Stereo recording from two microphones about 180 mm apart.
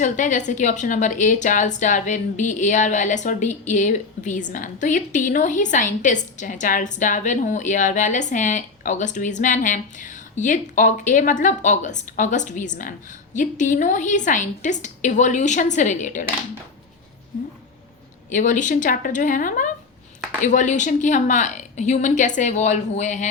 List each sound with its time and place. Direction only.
0.0 s a woman's voice: 45° left (ahead or behind)
18.3 s a woman's voice: 45° left (ahead or behind)